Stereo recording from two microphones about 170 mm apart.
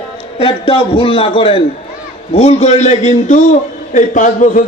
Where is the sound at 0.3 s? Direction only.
35° left (ahead or behind).